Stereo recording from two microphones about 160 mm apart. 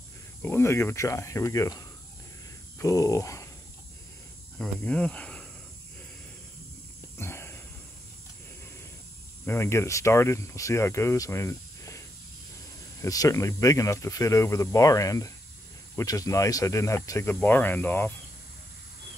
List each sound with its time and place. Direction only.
0.4 s speech: 15° left (ahead or behind)
4.6 s speech: 5° left (ahead or behind)
7.2 s wheeze: 15° left (ahead or behind)
9.5 s speech: 15° left (ahead or behind)
13.0 s speech: 20° left (ahead or behind)